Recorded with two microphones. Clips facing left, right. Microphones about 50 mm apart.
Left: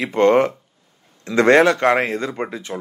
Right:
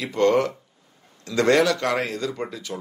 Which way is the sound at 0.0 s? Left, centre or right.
Left.